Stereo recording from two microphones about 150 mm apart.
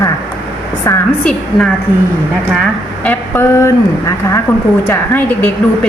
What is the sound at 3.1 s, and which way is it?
Speech, 15° left (ahead or behind).